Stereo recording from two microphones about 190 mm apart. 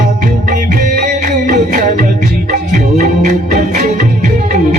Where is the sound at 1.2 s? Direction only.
40° right (ahead or behind).